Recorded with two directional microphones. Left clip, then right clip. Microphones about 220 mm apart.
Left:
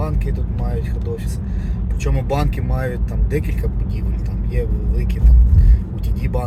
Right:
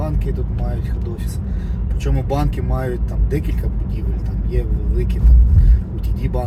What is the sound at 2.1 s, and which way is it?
Speech, 15° left (ahead or behind).